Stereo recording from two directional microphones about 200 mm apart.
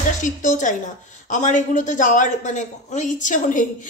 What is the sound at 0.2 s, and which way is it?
A woman's voice, 40° left (ahead or behind).